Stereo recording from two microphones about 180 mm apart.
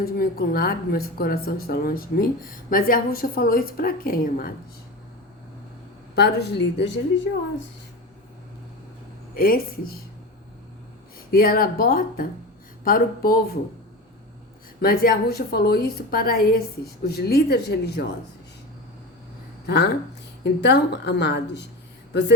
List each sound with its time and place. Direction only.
0.0 s a woman's voice: 55° left (ahead or behind)
6.1 s a woman's voice: 65° left (ahead or behind)
9.3 s a woman's voice: 55° left (ahead or behind)
11.3 s a woman's voice: 55° left (ahead or behind)
14.8 s a woman's voice: 55° left (ahead or behind)
19.6 s a woman's voice: 65° left (ahead or behind)